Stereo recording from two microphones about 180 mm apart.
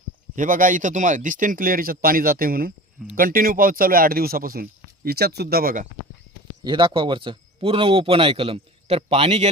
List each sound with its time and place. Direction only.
0.3 s speech: 50° right (ahead or behind)
6.7 s speech: 25° right (ahead or behind)